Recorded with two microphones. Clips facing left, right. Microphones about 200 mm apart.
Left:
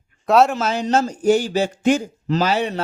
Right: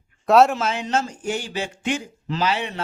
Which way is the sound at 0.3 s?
Centre (ahead or behind).